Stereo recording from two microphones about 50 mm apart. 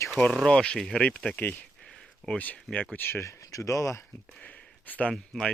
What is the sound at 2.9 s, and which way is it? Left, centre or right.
Speech, left.